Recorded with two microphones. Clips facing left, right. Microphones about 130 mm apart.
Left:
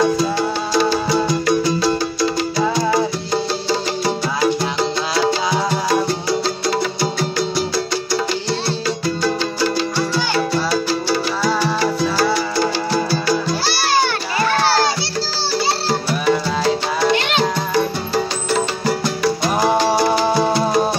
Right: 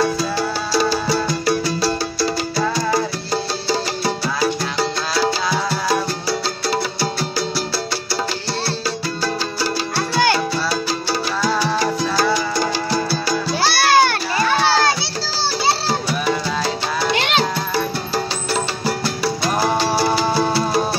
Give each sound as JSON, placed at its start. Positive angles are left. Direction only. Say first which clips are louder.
{"t": 0.7, "sound": "music", "louder": "left 1 dB", "side_deg": -5}
{"t": 2.7, "sound": "music", "louder": "left 3 dB", "side_deg": 15}
{"t": 9.2, "sound": "music", "louder": "left 3 dB", "side_deg": -10}
{"t": 11.6, "sound": "music", "louder": "left 1 dB", "side_deg": -15}
{"t": 15.9, "sound": "music", "louder": "left 3 dB", "side_deg": -10}
{"t": 18.1, "sound": "music", "louder": "left 4 dB", "side_deg": -10}
{"t": 20.2, "sound": "music", "louder": "left 2 dB", "side_deg": 15}